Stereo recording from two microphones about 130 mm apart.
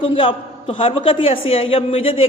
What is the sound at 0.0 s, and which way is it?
A woman's voice, 40° left (ahead or behind).